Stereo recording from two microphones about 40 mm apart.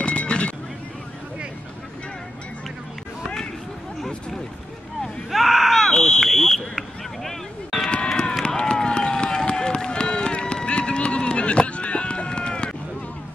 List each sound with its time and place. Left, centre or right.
0.0 s vehicle: left
5.3 s a sound: centre
8.2 s run: left